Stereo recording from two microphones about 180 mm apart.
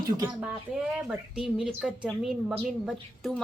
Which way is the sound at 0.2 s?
15° right (ahead or behind).